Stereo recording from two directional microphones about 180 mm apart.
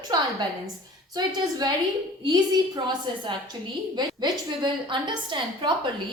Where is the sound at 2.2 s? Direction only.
25° right (ahead or behind).